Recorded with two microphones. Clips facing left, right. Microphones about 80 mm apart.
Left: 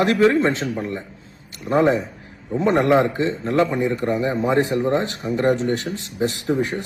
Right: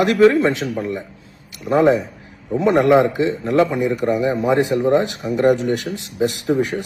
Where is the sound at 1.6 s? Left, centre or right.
Centre.